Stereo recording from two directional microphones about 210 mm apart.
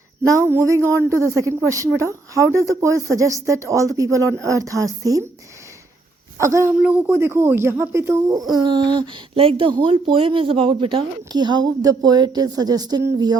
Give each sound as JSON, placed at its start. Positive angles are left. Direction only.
{"t": 0.3, "sound": "a woman's voice", "side_deg": -15}
{"t": 6.3, "sound": "speech", "side_deg": -15}